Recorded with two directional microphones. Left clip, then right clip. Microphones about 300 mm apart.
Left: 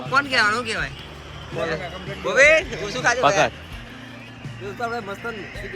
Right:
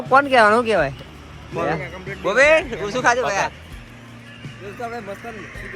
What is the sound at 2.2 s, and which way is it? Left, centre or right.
Speech, centre.